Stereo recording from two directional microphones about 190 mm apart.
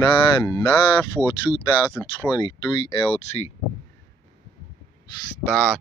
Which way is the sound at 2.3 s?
25° left (ahead or behind).